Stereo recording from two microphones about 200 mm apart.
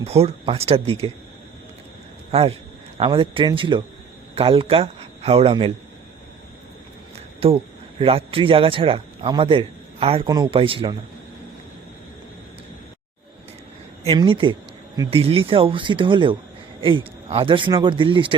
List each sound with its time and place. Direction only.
0.1 s speech: 30° right (ahead or behind)
2.3 s a man's voice: 30° right (ahead or behind)
7.4 s a man's voice: 30° right (ahead or behind)
14.0 s speech: 30° right (ahead or behind)